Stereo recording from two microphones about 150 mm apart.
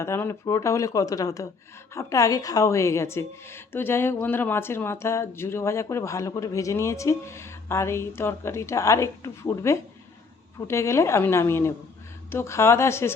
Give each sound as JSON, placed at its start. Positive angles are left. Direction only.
{"t": 0.0, "sound": "a woman's voice", "side_deg": 15}